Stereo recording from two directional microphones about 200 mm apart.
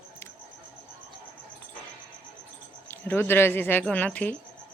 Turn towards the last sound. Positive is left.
turn(degrees=10)  # may be behind; listen again after turning